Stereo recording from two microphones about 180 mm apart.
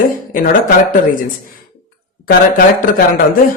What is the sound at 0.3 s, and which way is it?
Speech, 50° left (ahead or behind).